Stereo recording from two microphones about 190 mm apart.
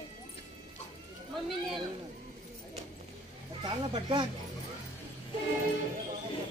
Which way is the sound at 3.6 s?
25° right (ahead or behind).